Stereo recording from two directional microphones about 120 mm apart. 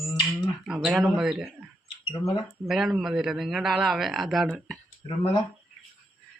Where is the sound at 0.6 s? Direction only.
5° right (ahead or behind).